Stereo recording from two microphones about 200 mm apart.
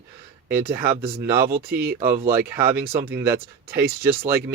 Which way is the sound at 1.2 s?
15° right (ahead or behind).